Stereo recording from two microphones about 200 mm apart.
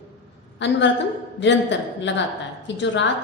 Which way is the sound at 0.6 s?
65° left (ahead or behind).